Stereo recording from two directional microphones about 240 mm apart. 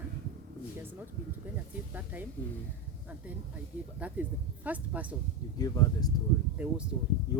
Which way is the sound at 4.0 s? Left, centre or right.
Centre.